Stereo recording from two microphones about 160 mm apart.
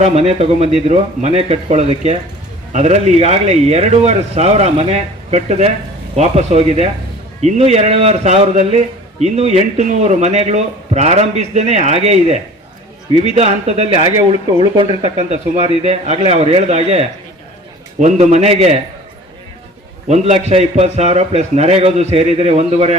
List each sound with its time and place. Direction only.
0.0 s a man's voice: 40° right (ahead or behind)
15.3 s a man's voice: 40° right (ahead or behind)
20.1 s speech: 45° right (ahead or behind)